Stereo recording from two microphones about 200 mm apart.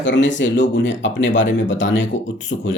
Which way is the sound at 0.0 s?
65° left (ahead or behind).